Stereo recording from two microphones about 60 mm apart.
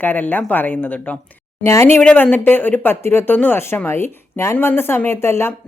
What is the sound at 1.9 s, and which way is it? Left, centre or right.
Speech, left.